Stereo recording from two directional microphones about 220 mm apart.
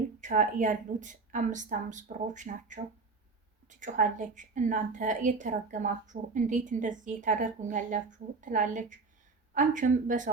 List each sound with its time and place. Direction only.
0.2 s a woman's voice: 35° right (ahead or behind)